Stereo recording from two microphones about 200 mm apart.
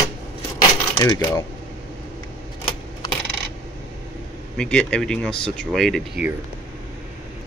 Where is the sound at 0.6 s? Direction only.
15° left (ahead or behind).